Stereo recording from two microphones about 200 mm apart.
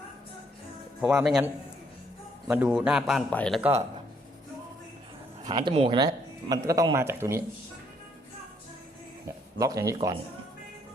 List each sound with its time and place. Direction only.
1.0 s a man's voice: 5° right (ahead or behind)
2.5 s a man's voice: 10° right (ahead or behind)
3.6 s speech: 10° right (ahead or behind)
5.5 s speech: 20° right (ahead or behind)
9.2 s speech: 15° right (ahead or behind)